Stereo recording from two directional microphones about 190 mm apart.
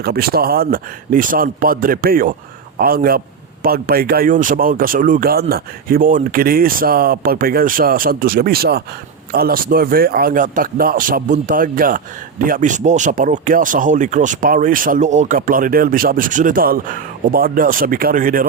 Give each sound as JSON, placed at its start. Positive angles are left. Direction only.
{"t": 0.0, "sound": "speech", "side_deg": -55}